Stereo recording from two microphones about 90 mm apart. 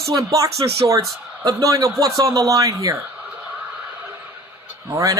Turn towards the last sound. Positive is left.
turn(degrees=-35)  # may be behind; listen again after turning